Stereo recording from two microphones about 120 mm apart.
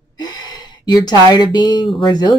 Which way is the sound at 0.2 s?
35° left (ahead or behind).